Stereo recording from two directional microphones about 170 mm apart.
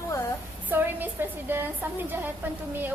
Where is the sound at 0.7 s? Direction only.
10° right (ahead or behind).